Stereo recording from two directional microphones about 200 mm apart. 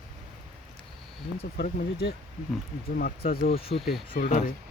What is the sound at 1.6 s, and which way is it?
Speech, 50° left (ahead or behind).